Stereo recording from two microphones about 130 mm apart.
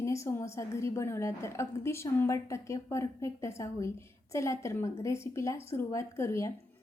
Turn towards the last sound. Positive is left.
turn(degrees=20)  # may be behind; listen again after turning